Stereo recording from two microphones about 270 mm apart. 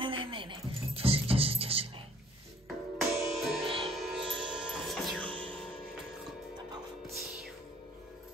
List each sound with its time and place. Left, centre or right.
0.0 s music: centre
3.0 s music: centre
3.6 s music: centre
3.9 s music: centre
4.5 s a sound: centre
5.2 s music: centre